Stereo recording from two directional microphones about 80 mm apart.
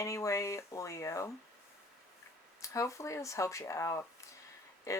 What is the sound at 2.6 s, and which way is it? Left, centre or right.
Speech, left.